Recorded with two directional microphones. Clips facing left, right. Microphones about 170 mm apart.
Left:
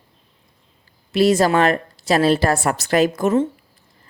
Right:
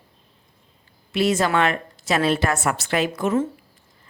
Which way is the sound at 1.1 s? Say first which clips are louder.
Left 5 dB; 35° left (ahead or behind).